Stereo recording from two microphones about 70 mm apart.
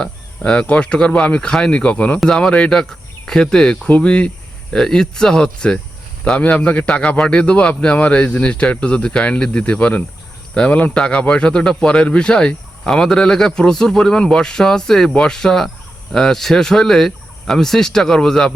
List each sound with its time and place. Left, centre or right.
0.0 s a man's voice: centre